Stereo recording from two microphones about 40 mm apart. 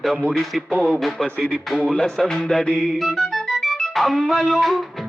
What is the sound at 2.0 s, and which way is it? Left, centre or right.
Music, centre.